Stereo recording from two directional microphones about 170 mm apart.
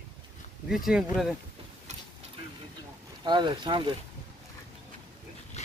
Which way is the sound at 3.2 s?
25° right (ahead or behind).